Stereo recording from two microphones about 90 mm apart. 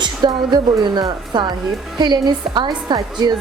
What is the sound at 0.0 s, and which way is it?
A woman's voice, 55° right (ahead or behind).